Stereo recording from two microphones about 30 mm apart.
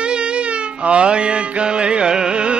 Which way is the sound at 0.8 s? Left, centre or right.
Right.